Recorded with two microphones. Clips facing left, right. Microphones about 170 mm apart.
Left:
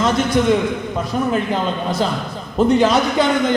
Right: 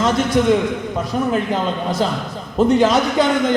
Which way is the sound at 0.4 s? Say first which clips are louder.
Right 1 dB; 40° right (ahead or behind).